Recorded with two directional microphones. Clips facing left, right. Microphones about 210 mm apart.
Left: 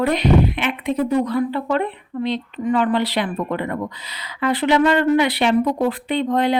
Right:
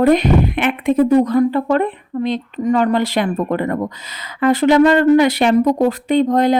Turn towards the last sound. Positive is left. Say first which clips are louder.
# right 5 dB
turn(degrees=-45)  # may be behind; listen again after turning